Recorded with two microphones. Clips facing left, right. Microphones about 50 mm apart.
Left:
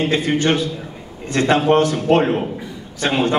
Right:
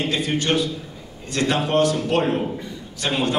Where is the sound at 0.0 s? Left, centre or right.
Left.